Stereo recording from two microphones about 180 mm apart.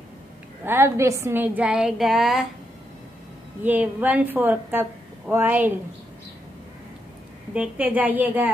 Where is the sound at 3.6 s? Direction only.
10° right (ahead or behind).